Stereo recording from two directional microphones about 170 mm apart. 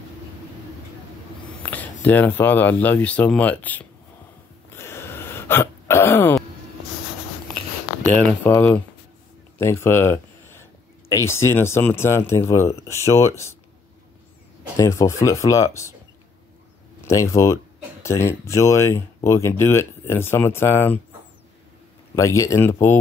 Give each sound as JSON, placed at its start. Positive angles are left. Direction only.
{"t": 1.7, "sound": "speech", "side_deg": 10}
{"t": 4.7, "sound": "hiccup", "side_deg": 15}
{"t": 8.0, "sound": "speech", "side_deg": 5}
{"t": 14.8, "sound": "speech", "side_deg": 20}
{"t": 17.0, "sound": "speech", "side_deg": 20}
{"t": 22.1, "sound": "speech", "side_deg": 15}